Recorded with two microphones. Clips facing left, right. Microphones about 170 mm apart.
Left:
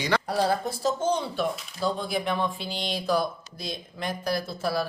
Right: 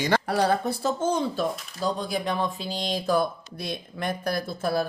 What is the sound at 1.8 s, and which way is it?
Speech, 40° right (ahead or behind).